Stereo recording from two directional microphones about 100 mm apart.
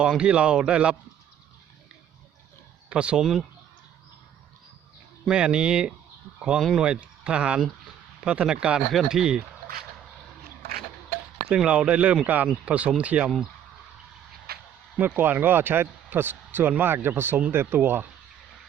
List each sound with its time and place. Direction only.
0.0 s speech: 10° right (ahead or behind)
2.9 s speech: 10° right (ahead or behind)
5.2 s speech: 10° right (ahead or behind)
11.4 s speech: 10° right (ahead or behind)
14.9 s speech: 15° right (ahead or behind)